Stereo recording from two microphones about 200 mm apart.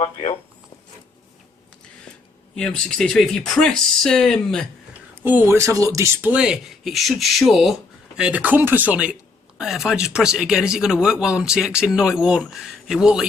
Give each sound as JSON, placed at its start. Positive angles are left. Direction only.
{"t": 0.0, "sound": "speech", "side_deg": 25}
{"t": 2.6, "sound": "speech", "side_deg": 5}
{"t": 5.2, "sound": "speech", "side_deg": -10}